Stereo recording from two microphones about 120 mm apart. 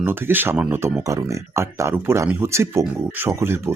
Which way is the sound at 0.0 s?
15° right (ahead or behind).